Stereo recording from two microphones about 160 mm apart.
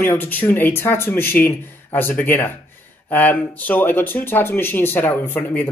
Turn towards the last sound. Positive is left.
turn(degrees=10)  # may be behind; listen again after turning